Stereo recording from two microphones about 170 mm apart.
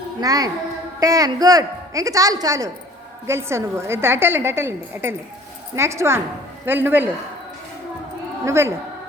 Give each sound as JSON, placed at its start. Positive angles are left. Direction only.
{"t": 0.2, "sound": "a woman's voice", "side_deg": -20}
{"t": 8.4, "sound": "a woman's voice", "side_deg": -15}